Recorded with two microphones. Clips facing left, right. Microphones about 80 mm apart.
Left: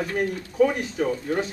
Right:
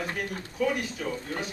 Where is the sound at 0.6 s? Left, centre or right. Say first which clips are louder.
Left 7 dB; left.